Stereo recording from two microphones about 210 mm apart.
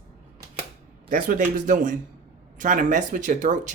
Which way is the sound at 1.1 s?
40° right (ahead or behind).